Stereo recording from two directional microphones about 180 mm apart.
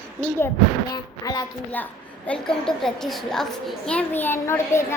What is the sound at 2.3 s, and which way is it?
A woman's voice, 5° left (ahead or behind).